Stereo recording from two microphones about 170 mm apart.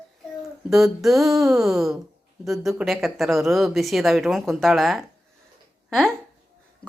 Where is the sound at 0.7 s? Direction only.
Centre (ahead or behind).